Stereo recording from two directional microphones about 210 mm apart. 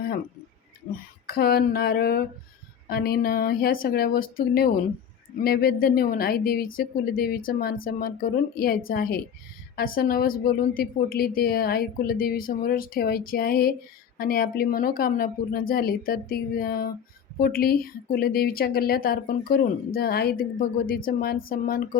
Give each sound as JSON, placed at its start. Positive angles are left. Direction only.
{"t": 0.9, "sound": "speech", "side_deg": 40}